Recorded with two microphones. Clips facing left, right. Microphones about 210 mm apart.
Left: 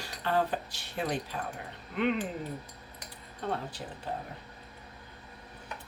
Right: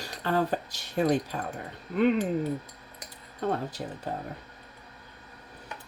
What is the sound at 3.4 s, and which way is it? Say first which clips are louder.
Speech: right 5 dB; 45° right (ahead or behind).